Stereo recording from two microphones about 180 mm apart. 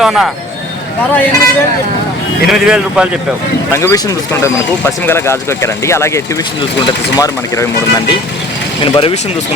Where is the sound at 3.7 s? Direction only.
15° left (ahead or behind).